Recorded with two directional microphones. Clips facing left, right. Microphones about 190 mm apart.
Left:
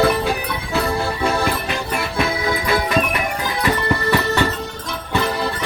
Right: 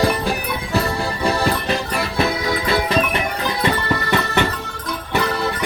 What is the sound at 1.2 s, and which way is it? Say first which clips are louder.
Music: right 4 dB; 35° right (ahead or behind).